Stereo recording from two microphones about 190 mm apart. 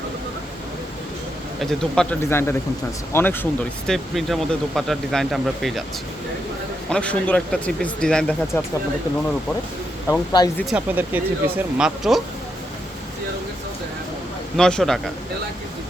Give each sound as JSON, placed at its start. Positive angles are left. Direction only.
{"t": 1.8, "sound": "speech", "side_deg": 5}
{"t": 6.9, "sound": "speech", "side_deg": 5}
{"t": 10.1, "sound": "speech", "side_deg": 20}
{"t": 10.7, "sound": "speech", "side_deg": -10}
{"t": 14.5, "sound": "speech", "side_deg": 5}